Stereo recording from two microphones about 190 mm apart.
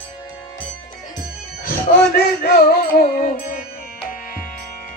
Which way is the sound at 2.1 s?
50° left (ahead or behind).